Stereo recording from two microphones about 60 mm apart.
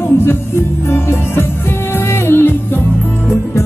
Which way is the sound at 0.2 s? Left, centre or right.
Left.